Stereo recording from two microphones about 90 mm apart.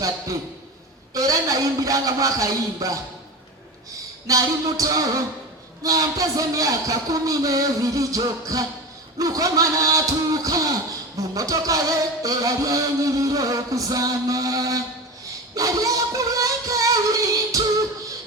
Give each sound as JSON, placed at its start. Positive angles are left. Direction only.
{"t": 1.1, "sound": "music", "side_deg": -40}
{"t": 4.3, "sound": "music", "side_deg": -40}